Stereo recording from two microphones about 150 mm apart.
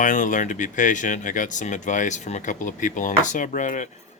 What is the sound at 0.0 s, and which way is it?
Speech, 55° left (ahead or behind).